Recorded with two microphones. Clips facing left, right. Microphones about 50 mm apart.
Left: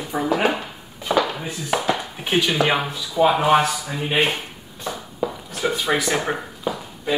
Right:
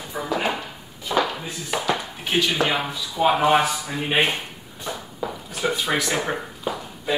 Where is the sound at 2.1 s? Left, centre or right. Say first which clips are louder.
Left 2 dB; left.